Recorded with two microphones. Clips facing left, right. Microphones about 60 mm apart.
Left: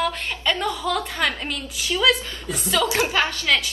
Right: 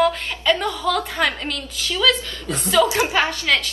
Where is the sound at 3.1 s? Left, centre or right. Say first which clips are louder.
Right 2 dB; centre.